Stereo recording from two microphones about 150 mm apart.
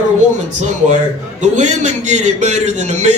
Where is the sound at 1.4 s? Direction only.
50° right (ahead or behind).